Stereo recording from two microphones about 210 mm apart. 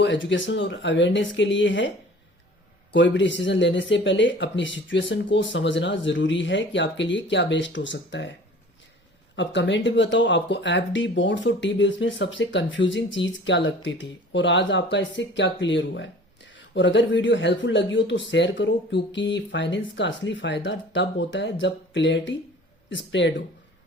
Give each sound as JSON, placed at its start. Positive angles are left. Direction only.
{"t": 0.0, "sound": "speech", "side_deg": 60}
{"t": 2.9, "sound": "speech", "side_deg": 60}